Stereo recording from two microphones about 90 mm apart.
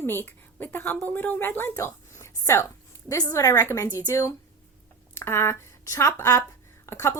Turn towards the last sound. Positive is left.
turn(degrees=30)  # may be behind; listen again after turning